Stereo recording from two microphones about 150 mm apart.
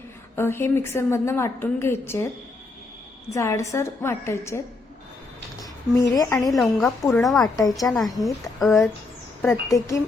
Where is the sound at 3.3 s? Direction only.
20° left (ahead or behind).